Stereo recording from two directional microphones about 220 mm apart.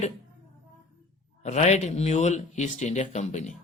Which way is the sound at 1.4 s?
30° left (ahead or behind).